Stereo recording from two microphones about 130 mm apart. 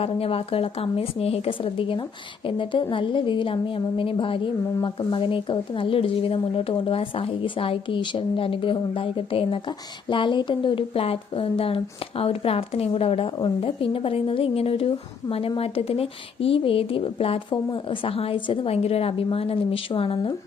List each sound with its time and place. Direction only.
0.0 s speech: 50° left (ahead or behind)